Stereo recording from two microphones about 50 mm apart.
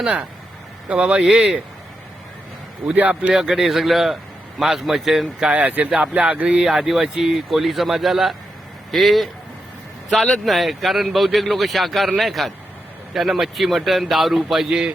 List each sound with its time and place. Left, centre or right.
0.9 s speech: right
1.3 s speech: centre
2.8 s speech: right
3.3 s a man's voice: centre
5.5 s speech: right
6.6 s a man's voice: centre
10.4 s a man's voice: centre